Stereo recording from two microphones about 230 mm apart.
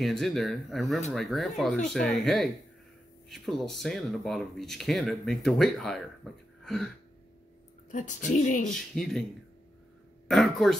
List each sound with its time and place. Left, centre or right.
0.0 s speech: centre
7.9 s speech: left
8.7 s speech: centre
10.2 s speech: centre